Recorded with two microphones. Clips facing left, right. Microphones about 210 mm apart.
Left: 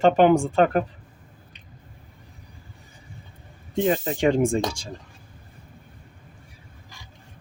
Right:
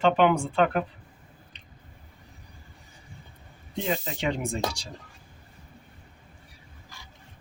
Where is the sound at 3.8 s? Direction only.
45° left (ahead or behind).